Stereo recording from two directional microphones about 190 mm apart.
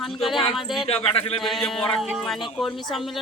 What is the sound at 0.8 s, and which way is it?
Speech, 30° left (ahead or behind).